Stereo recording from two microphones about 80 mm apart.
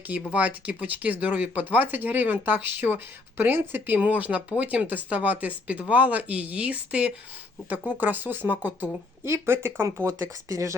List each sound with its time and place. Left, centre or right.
0.3 s speech: centre; by 10.8 s right